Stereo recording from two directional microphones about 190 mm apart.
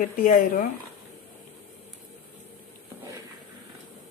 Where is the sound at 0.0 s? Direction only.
45° left (ahead or behind).